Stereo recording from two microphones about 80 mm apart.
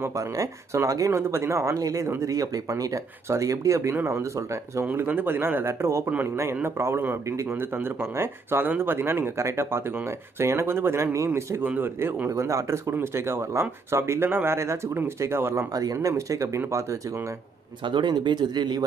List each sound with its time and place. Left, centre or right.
0.0 s speech: right
4.9 s speech: right
11.6 s speech: right
12.3 s speech: right
15.7 s speech: right
17.8 s speech: right